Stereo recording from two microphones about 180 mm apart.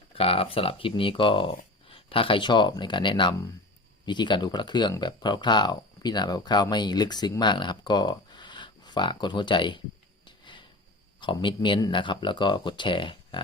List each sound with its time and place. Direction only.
0.1 s speech: 30° left (ahead or behind)
10.2 s a sound: 25° left (ahead or behind)
11.2 s speech: 25° left (ahead or behind)